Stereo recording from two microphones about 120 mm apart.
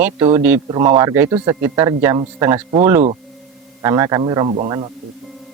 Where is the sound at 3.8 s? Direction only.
30° right (ahead or behind).